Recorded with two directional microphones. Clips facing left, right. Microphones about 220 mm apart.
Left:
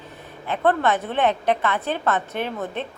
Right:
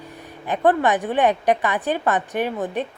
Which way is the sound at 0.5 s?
15° right (ahead or behind).